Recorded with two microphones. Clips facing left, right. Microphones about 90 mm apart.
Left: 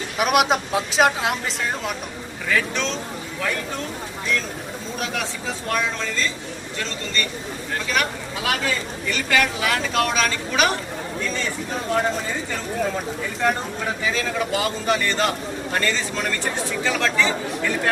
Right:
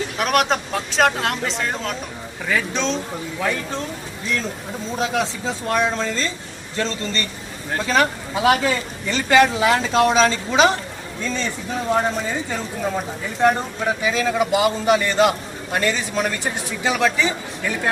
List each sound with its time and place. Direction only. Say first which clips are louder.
0.2 s speech: left 1 dB; 5° left (ahead or behind)
2.5 s a man's voice: right 1 dB; 20° right (ahead or behind)
4.9 s a man's voice: right 6 dB; 25° right (ahead or behind)
11.9 s a man's voice: right 2 dB; 20° right (ahead or behind)
14.0 s a man's voice: right 4 dB; 20° right (ahead or behind)